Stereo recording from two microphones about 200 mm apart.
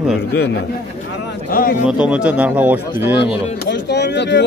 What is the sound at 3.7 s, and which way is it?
Speech, 60° left (ahead or behind).